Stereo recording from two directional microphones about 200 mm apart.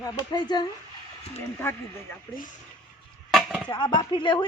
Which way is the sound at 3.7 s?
20° left (ahead or behind).